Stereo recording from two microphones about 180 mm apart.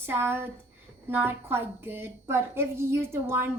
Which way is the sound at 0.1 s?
15° right (ahead or behind).